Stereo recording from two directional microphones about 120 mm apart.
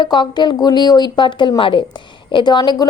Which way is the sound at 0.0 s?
40° left (ahead or behind).